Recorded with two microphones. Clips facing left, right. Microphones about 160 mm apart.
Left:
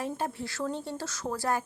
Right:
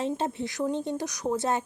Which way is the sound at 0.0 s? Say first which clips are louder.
Right 4 dB; 20° right (ahead or behind).